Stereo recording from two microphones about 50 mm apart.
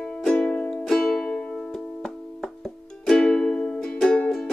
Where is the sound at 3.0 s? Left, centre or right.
Centre.